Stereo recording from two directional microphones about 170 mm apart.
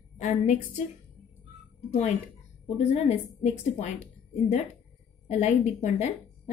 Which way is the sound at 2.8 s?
40° left (ahead or behind).